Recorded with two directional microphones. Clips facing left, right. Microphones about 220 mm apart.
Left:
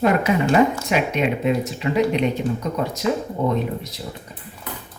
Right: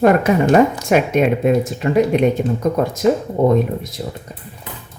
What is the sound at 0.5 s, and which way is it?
Speech, 50° right (ahead or behind).